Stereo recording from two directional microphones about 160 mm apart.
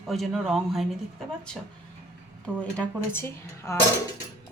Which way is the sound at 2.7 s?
15° left (ahead or behind).